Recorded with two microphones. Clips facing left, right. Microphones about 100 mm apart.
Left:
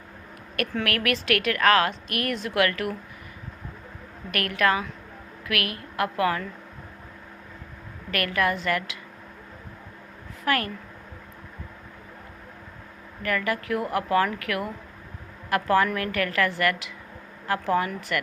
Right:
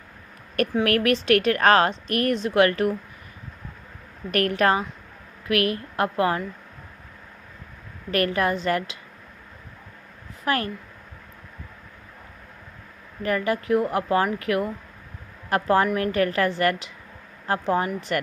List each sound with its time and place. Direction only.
0.9 s a woman's voice: 30° right (ahead or behind)
4.3 s a woman's voice: 35° right (ahead or behind)
8.1 s a woman's voice: 30° right (ahead or behind)
10.4 s speech: 25° right (ahead or behind)
13.2 s a woman's voice: 25° right (ahead or behind)